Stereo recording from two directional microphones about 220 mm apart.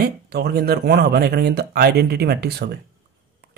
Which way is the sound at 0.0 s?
45° right (ahead or behind).